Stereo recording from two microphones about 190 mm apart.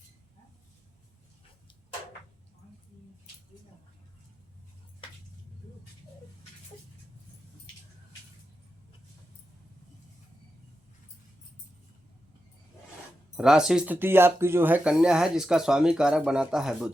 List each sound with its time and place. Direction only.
13.3 s speech: 5° right (ahead or behind)